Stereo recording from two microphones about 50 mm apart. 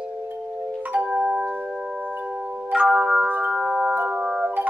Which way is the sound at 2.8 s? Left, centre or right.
Centre.